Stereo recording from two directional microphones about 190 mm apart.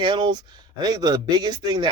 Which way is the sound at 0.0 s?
25° right (ahead or behind).